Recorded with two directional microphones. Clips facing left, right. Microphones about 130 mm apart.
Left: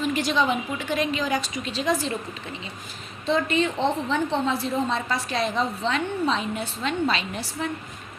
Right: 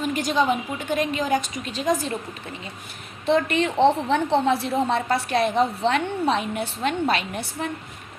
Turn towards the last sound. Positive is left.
turn(degrees=-55)  # may be behind; listen again after turning